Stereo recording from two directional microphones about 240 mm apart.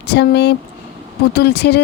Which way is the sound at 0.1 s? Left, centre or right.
Left.